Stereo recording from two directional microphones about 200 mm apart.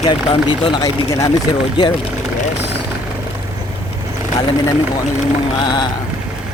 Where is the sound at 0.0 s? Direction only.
25° left (ahead or behind).